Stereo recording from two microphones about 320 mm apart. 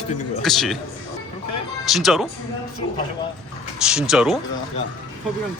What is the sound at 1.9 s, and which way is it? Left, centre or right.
Speech, centre.